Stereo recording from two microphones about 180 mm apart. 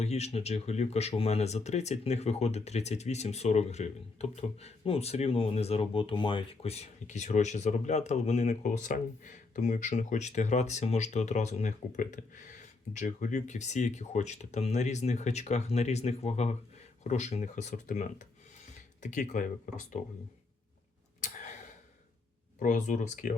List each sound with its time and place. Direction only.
0.0 s speech: 35° left (ahead or behind)
21.2 s a sound: 45° left (ahead or behind)
22.5 s speech: 45° left (ahead or behind)